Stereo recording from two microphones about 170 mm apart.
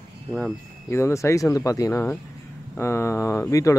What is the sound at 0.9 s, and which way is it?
Speech, 15° left (ahead or behind).